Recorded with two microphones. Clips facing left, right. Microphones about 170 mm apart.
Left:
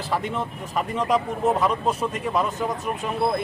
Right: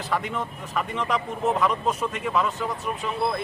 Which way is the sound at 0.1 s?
30° left (ahead or behind).